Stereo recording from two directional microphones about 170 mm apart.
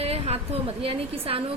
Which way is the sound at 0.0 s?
35° right (ahead or behind).